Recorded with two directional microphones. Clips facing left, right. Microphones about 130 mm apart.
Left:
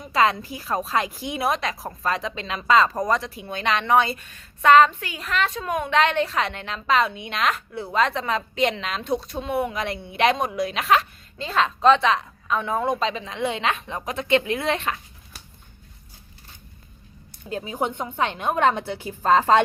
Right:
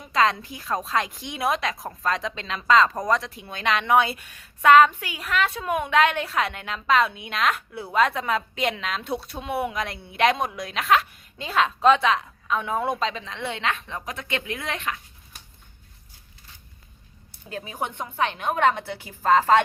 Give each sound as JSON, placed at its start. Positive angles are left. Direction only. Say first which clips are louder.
{"t": 0.1, "sound": "a woman's voice", "louder": "left 1 dB", "side_deg": 5}
{"t": 13.2, "sound": "a woman's voice", "louder": "left 4 dB", "side_deg": 15}
{"t": 17.5, "sound": "a woman's voice", "louder": "left 5 dB", "side_deg": 20}